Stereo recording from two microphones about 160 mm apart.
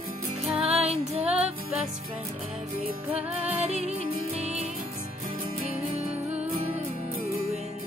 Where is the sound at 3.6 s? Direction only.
45° right (ahead or behind).